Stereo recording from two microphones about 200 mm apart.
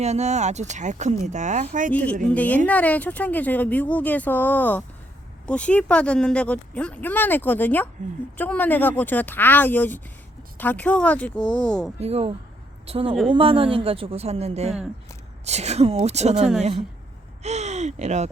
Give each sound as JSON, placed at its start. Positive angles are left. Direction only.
{"t": 0.0, "sound": "speech", "side_deg": -35}
{"t": 1.9, "sound": "speech", "side_deg": 5}
{"t": 11.9, "sound": "a woman's voice", "side_deg": -30}